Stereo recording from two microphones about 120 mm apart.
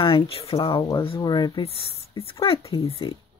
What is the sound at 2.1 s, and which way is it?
Speech, 50° left (ahead or behind).